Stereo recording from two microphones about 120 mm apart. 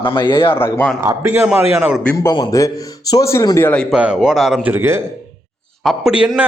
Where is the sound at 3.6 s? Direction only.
15° left (ahead or behind).